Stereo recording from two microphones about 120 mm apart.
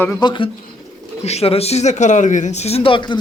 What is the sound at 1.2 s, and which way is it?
Speech, 60° left (ahead or behind).